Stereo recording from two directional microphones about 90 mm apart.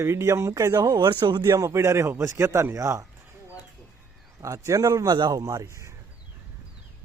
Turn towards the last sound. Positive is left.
turn(degrees=-35)  # may be behind; listen again after turning